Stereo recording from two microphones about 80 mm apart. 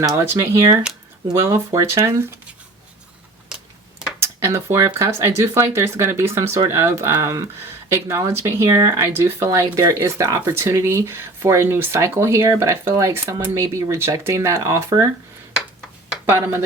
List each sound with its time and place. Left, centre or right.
0.1 s speech: right
4.4 s speech: right
16.3 s speech: right